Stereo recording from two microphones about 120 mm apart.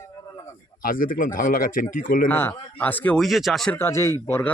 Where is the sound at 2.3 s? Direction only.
20° left (ahead or behind).